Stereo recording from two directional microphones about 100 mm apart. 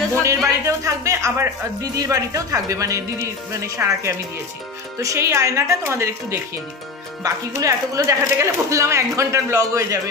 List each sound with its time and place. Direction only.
0.1 s speech: 30° right (ahead or behind)